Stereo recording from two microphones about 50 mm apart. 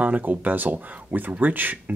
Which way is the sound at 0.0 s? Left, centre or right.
Right.